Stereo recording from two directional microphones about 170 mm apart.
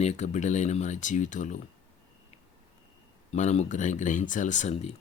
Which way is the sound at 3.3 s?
45° left (ahead or behind).